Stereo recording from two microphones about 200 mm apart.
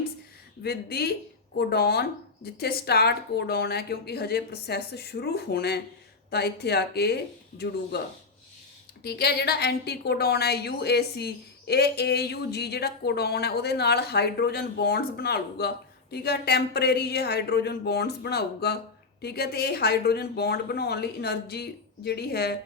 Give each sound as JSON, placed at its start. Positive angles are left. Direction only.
{"t": 0.6, "sound": "a woman's voice", "side_deg": 50}
{"t": 9.0, "sound": "a woman's voice", "side_deg": 55}